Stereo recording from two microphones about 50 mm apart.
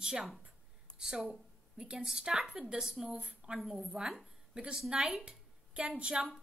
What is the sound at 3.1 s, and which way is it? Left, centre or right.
Speech, right.